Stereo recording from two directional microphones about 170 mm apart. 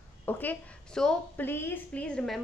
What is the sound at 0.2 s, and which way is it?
A woman's voice, 10° left (ahead or behind).